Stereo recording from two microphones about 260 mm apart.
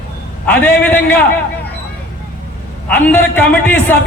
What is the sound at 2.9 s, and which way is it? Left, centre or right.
Speech, centre.